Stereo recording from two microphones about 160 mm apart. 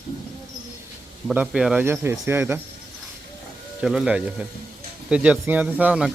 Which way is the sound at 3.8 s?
5° right (ahead or behind).